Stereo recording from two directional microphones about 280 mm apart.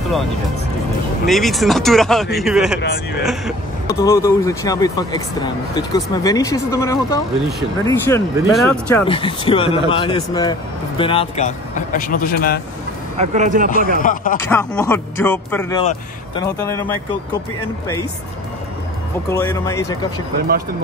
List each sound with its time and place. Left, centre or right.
1.2 s speech: centre
2.8 s speech: left
3.8 s speech: centre
8.1 s speech: centre; by 12.5 s left
13.2 s speech: right
13.9 s speech: left
14.5 s speech: centre
15.8 s speech: left
16.6 s speech: centre
19.3 s speech: centre
20.3 s speech: right